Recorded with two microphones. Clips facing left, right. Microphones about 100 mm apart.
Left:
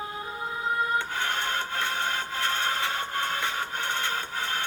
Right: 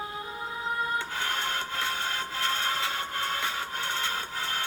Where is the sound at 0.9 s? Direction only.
55° left (ahead or behind).